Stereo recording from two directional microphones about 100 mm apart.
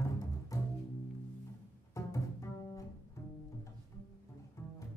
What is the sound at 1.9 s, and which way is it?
Bowed string instrument, 35° left (ahead or behind).